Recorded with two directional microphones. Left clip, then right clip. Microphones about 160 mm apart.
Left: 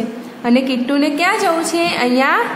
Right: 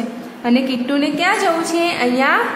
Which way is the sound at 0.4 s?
20° left (ahead or behind).